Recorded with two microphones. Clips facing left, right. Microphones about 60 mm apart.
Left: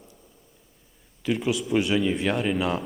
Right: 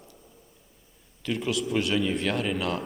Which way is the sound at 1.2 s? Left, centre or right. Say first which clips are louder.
Left 3 dB; centre.